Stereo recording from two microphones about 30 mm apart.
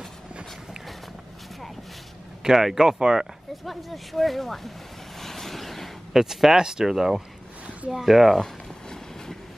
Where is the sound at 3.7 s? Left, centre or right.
Centre.